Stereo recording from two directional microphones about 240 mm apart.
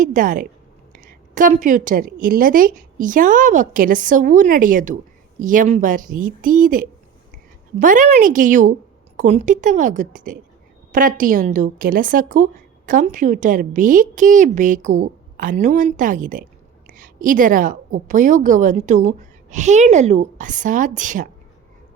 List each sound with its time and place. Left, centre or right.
0.0 s a woman's voice: right